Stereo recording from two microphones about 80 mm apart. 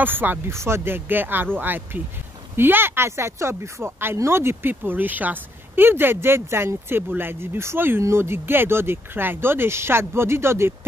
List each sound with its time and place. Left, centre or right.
0.0 s speech: right